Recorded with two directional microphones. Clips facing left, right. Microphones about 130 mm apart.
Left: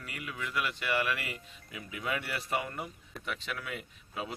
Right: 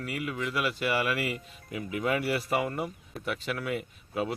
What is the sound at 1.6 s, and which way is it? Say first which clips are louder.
Speech: right 7 dB; 45° right (ahead or behind).